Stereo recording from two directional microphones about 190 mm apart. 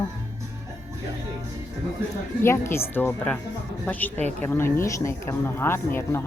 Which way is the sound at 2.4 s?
15° left (ahead or behind).